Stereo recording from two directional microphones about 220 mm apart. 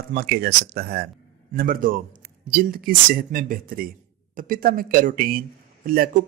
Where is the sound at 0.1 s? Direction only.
45° right (ahead or behind).